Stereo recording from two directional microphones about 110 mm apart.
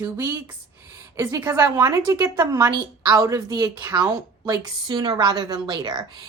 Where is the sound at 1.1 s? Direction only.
25° right (ahead or behind).